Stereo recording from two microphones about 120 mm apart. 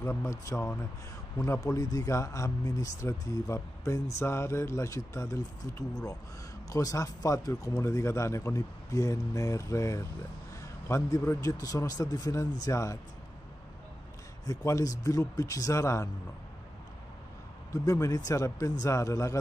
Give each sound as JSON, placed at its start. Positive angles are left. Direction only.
{"t": 0.0, "sound": "speech", "side_deg": 20}
{"t": 14.4, "sound": "speech", "side_deg": 30}
{"t": 17.8, "sound": "speech", "side_deg": 30}